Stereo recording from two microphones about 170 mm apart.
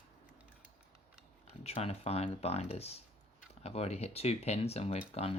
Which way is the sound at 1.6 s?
35° left (ahead or behind).